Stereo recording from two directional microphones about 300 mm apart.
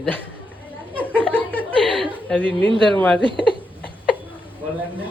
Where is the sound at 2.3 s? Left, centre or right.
Centre.